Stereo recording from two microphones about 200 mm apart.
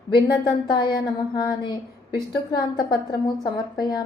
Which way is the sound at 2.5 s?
20° left (ahead or behind).